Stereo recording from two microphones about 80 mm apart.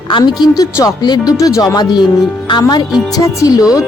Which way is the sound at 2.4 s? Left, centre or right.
Left.